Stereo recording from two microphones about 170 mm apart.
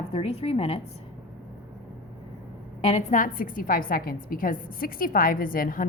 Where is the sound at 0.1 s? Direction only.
35° left (ahead or behind).